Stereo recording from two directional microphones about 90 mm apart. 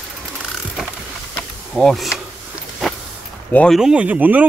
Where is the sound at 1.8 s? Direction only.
5° left (ahead or behind).